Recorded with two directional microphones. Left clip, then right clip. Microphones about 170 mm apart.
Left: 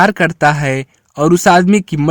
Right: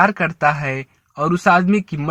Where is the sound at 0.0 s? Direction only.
45° left (ahead or behind).